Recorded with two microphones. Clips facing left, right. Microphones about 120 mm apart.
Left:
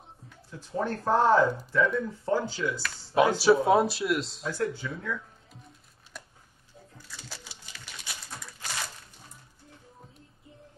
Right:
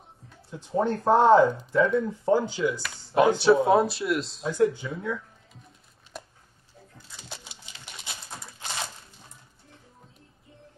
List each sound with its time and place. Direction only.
0.5 s speech: 20° right (ahead or behind)
3.3 s speech: centre (ahead or behind)
4.5 s speech: 20° right (ahead or behind)
7.2 s a sound: 20° right (ahead or behind)